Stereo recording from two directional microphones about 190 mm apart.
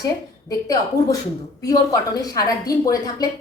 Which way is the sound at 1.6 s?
20° left (ahead or behind).